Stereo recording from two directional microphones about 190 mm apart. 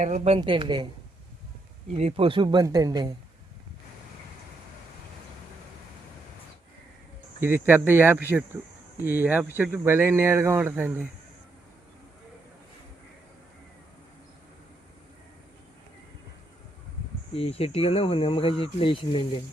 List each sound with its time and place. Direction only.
0.0 s speech: 35° right (ahead or behind)
1.9 s speech: 30° right (ahead or behind)
7.4 s speech: 10° right (ahead or behind)
17.3 s speech: 30° left (ahead or behind)